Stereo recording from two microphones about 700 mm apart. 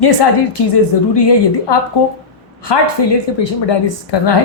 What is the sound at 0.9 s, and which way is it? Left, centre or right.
A woman's voice, left.